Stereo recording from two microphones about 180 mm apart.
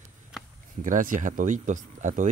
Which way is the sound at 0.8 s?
45° right (ahead or behind).